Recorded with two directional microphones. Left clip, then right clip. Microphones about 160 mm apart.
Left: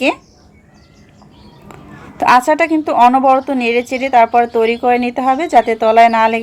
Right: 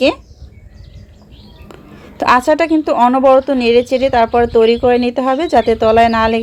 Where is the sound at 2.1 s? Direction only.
45° right (ahead or behind).